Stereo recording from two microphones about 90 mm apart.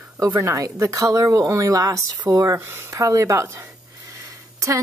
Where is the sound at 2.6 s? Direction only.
30° right (ahead or behind).